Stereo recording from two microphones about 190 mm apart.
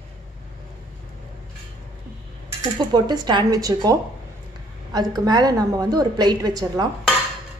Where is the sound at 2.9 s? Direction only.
20° right (ahead or behind).